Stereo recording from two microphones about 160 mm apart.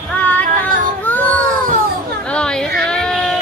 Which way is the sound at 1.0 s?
10° left (ahead or behind).